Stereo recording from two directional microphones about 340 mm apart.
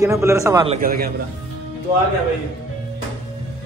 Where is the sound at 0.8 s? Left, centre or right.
Right.